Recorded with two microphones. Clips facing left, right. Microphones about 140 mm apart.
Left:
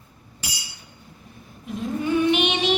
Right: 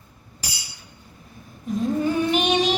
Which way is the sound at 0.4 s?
40° right (ahead or behind).